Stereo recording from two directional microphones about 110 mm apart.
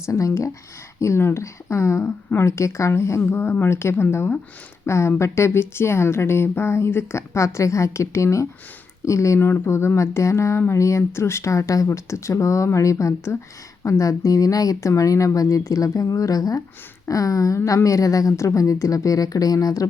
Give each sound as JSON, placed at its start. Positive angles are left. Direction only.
{"t": 0.0, "sound": "speech", "side_deg": 30}